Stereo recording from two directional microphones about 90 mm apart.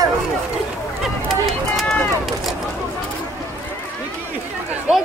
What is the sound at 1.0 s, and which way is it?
Run, centre (ahead or behind).